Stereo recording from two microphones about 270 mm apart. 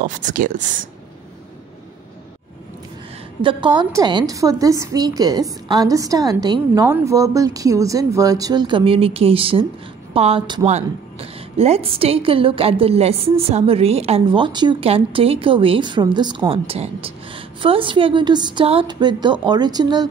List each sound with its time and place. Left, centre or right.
0.0 s a woman's voice: right
3.4 s a woman's voice: centre